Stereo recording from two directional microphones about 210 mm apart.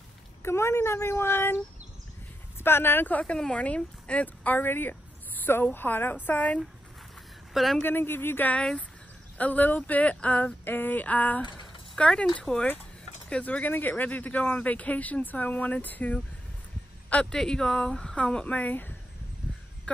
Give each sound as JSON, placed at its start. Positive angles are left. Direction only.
{"t": 0.4, "sound": "speech", "side_deg": 10}
{"t": 2.6, "sound": "speech", "side_deg": 10}